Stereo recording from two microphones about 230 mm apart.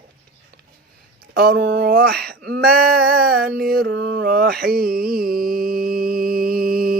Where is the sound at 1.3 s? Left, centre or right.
Right.